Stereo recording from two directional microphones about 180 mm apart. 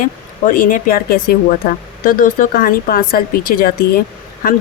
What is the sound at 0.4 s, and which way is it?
Speech, 50° left (ahead or behind).